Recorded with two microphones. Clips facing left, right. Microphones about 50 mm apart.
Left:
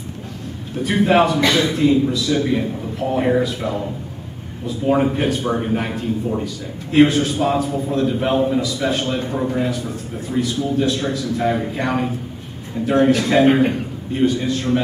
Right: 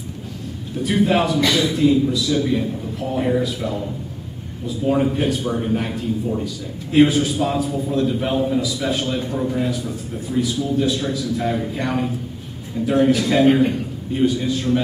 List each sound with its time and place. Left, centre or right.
0.8 s a man's voice: centre
2.4 s a man's voice: centre
3.4 s a man's voice: centre
4.8 s a man's voice: centre
6.4 s a man's voice: centre
11.5 s a man's voice: centre
14.1 s a man's voice: centre